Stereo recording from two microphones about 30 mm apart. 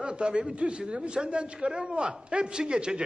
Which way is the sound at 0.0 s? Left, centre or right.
Right.